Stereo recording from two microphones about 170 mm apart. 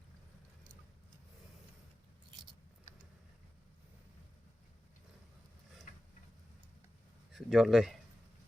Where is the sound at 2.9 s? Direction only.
45° right (ahead or behind).